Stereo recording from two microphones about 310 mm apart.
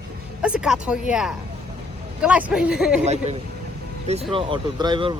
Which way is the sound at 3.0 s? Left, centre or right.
Right.